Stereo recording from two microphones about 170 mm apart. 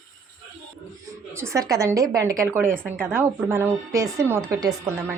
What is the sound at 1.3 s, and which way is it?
A woman's voice, 15° right (ahead or behind).